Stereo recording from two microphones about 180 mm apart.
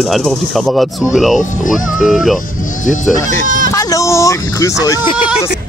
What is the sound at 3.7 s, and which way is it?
Speech, 15° left (ahead or behind).